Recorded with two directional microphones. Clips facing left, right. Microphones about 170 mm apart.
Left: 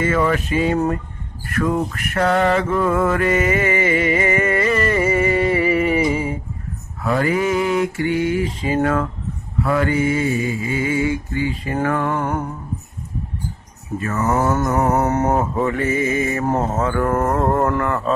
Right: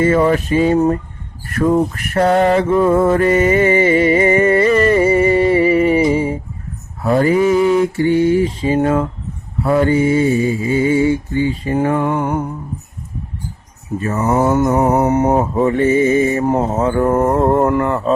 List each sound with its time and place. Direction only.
0.0 s mantra: 30° right (ahead or behind)
2.7 s music: 30° right (ahead or behind)
7.0 s mantra: 30° right (ahead or behind); by 12.5 s 15° right (ahead or behind)
14.2 s mantra: 15° right (ahead or behind)
16.4 s a sound: 15° right (ahead or behind)
16.9 s mantra: 20° right (ahead or behind)